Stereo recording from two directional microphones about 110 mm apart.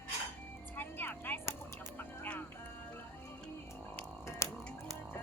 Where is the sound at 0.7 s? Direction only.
15° left (ahead or behind).